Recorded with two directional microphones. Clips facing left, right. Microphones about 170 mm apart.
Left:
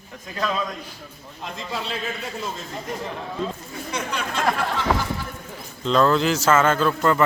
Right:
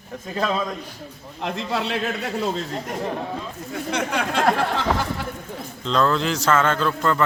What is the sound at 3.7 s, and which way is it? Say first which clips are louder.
Speech: right 4 dB; 70° right (ahead or behind).